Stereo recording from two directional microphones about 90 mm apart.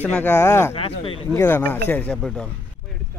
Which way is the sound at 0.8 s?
90° left.